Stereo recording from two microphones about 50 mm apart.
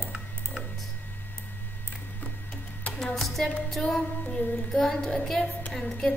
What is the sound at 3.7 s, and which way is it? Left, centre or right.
A woman's voice, centre.